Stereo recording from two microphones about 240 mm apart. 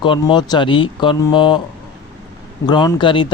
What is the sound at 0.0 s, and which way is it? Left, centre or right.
Speech, centre.